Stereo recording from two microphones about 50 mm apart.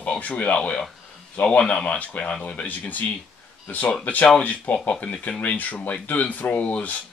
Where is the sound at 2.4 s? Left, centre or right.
Left.